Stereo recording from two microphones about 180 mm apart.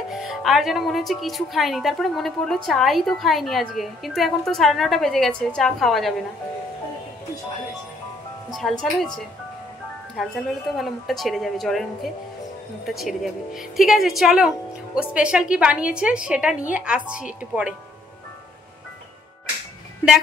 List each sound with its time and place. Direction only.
0.1 s a woman's voice: centre (ahead or behind)
8.5 s a woman's voice: centre (ahead or behind)